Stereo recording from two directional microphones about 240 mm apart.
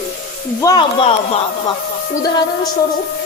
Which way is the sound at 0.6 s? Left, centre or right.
Centre.